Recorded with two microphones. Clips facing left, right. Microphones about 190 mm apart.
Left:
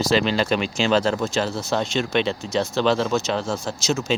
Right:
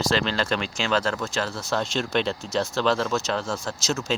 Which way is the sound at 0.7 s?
25° left (ahead or behind).